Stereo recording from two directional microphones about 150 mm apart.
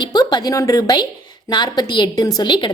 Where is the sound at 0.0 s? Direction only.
30° left (ahead or behind).